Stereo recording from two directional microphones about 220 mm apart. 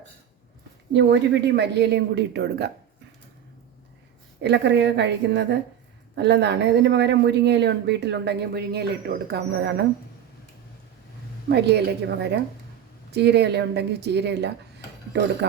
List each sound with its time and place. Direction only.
0.9 s speech: 50° right (ahead or behind)
4.4 s speech: 50° right (ahead or behind)
11.4 s speech: 50° right (ahead or behind)